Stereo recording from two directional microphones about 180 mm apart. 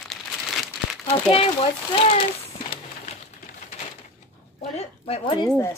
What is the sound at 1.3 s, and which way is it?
Speech, 30° left (ahead or behind).